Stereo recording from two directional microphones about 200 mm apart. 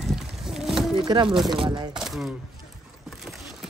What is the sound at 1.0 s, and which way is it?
Speech, 25° right (ahead or behind).